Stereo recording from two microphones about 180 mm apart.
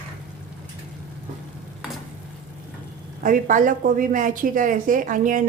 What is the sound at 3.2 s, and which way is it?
A woman's voice, 45° right (ahead or behind).